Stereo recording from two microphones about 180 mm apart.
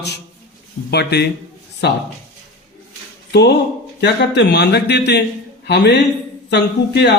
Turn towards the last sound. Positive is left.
turn(degrees=70)  # may be behind; listen again after turning